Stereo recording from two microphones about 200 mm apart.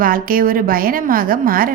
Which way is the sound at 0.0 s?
45° right (ahead or behind).